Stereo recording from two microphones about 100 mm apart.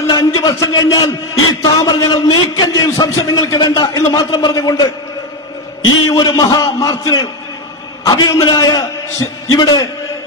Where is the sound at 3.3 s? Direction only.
45° left (ahead or behind).